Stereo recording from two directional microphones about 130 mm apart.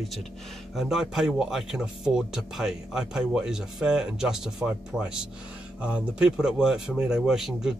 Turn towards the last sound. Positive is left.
turn(degrees=-5)  # may be behind; listen again after turning